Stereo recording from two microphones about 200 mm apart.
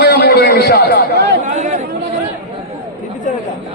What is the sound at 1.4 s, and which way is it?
Chatter, 35° right (ahead or behind).